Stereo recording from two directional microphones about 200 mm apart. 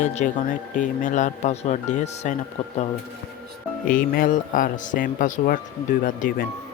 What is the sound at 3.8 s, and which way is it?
A man's voice, 45° left (ahead or behind).